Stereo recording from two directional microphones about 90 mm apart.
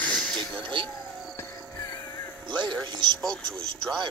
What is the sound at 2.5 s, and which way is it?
Speech, 55° right (ahead or behind).